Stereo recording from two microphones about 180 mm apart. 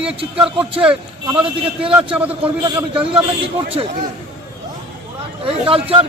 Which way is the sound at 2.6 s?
25° right (ahead or behind).